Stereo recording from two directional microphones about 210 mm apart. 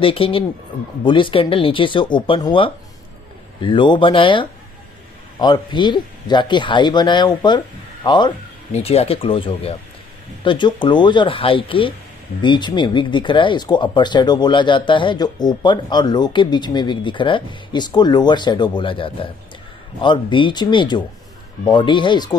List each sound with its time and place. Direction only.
0.0 s speech: 25° left (ahead or behind)